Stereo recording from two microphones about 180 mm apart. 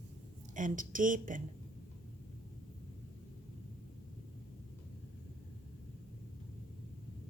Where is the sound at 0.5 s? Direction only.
45° right (ahead or behind).